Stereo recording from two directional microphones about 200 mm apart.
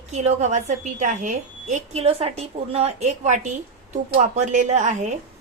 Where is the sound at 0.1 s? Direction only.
35° right (ahead or behind).